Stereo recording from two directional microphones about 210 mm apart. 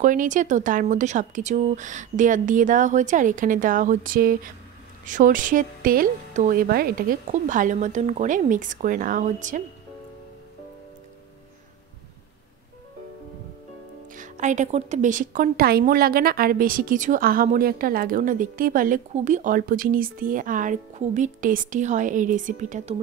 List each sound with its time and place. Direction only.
0.0 s speech: 40° right (ahead or behind)
14.1 s speech: 35° right (ahead or behind)